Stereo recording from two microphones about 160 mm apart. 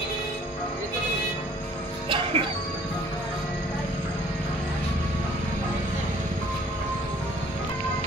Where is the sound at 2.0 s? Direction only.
30° right (ahead or behind).